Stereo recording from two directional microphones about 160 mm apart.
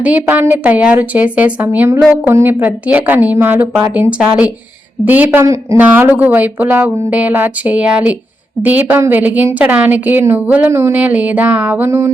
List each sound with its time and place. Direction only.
0.0 s a woman's voice: 10° right (ahead or behind)